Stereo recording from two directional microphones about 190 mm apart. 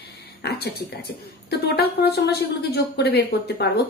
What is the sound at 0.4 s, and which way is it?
Speech, 55° left (ahead or behind).